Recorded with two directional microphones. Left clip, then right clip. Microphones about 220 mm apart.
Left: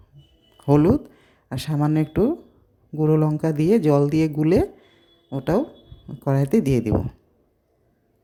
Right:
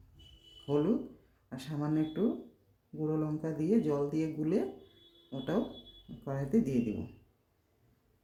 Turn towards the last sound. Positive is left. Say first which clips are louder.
# left 12 dB
turn(degrees=45)  # may be behind; listen again after turning